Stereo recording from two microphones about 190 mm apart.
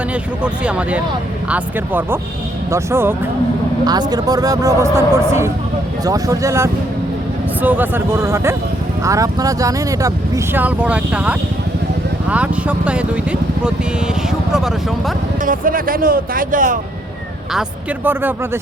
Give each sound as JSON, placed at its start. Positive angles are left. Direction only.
{"t": 0.1, "sound": "speech", "side_deg": -5}
{"t": 15.4, "sound": "speech", "side_deg": -45}
{"t": 17.5, "sound": "speech", "side_deg": -5}